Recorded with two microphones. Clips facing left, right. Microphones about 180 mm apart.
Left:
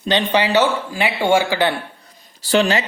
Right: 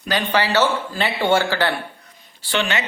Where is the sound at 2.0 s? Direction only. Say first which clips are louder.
Left 1 dB; 40° left (ahead or behind).